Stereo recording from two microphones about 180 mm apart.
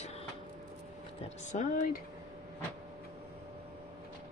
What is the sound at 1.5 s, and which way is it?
Speech, 45° left (ahead or behind).